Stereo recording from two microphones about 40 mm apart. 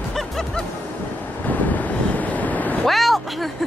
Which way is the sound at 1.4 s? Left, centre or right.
Left.